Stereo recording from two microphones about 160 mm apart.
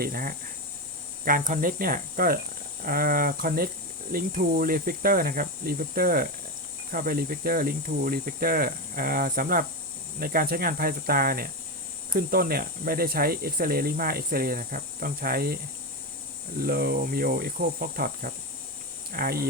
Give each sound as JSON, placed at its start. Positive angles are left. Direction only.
{"t": 0.0, "sound": "cricket", "side_deg": -65}
{"t": 1.2, "sound": "speech", "side_deg": -60}
{"t": 10.2, "sound": "cricket", "side_deg": -65}
{"t": 12.1, "sound": "speech", "side_deg": -65}
{"t": 16.6, "sound": "cricket", "side_deg": -70}